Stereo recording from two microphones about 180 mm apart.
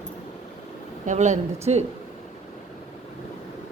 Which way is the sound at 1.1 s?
40° right (ahead or behind).